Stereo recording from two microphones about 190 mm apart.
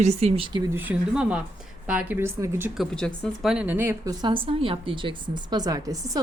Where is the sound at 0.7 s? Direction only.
10° right (ahead or behind).